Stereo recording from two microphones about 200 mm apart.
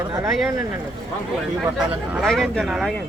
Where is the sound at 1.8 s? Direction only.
Centre (ahead or behind).